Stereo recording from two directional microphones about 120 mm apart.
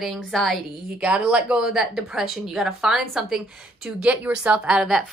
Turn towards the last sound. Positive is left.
turn(degrees=-5)  # may be behind; listen again after turning